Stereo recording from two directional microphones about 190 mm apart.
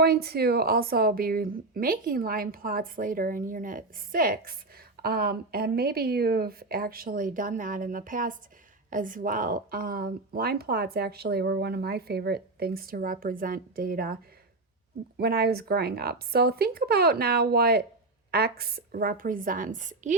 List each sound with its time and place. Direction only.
0.0 s speech: 55° right (ahead or behind)
15.2 s speech: 55° right (ahead or behind)